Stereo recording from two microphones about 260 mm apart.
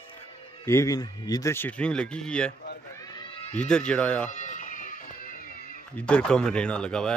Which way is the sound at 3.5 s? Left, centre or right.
Centre.